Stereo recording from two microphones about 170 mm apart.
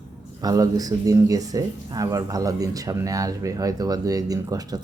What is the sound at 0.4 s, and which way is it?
Speech, 20° right (ahead or behind).